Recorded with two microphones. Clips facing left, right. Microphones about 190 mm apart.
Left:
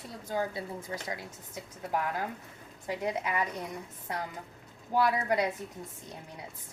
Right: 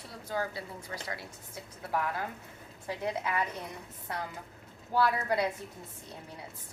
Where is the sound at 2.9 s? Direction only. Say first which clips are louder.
Left 1 dB; 15° left (ahead or behind).